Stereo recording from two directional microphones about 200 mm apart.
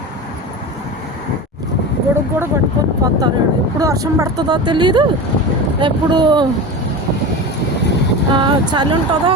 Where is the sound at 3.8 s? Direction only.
15° right (ahead or behind).